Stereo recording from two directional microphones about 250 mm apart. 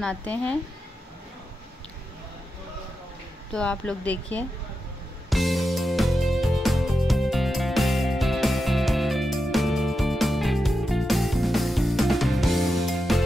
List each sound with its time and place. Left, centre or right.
0.0 s speech: centre
3.5 s speech: centre
5.3 s music: centre